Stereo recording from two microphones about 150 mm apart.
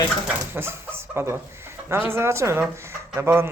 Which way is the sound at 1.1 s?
15° right (ahead or behind).